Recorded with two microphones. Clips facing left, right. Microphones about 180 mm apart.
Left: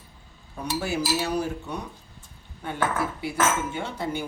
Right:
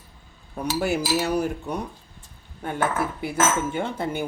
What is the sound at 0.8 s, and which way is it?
Cutlery, 60° right (ahead or behind).